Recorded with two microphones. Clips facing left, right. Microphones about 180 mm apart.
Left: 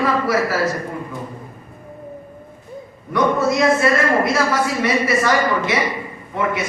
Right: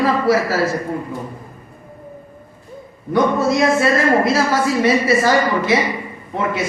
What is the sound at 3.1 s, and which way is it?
A woman's voice, 25° right (ahead or behind).